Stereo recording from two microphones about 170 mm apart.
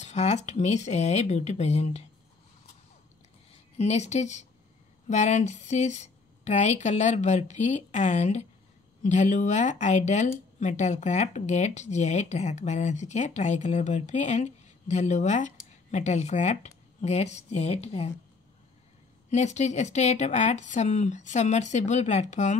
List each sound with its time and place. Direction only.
0.0 s a sound: 40° left (ahead or behind)
0.5 s speech: 45° left (ahead or behind)
3.7 s speech: 40° left (ahead or behind)
19.3 s speech: 40° left (ahead or behind)